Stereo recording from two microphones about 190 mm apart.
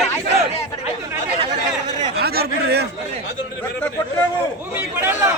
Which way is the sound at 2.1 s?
55° right (ahead or behind).